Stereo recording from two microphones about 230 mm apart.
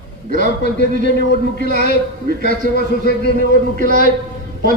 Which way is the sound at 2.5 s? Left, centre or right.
Right.